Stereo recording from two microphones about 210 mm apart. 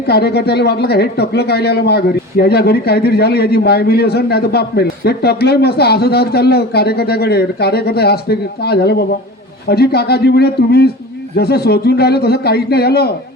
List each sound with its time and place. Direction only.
0.1 s speech: 50° left (ahead or behind)